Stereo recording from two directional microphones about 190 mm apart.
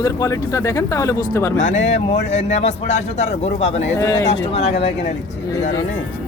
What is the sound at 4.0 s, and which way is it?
Speech, 15° left (ahead or behind).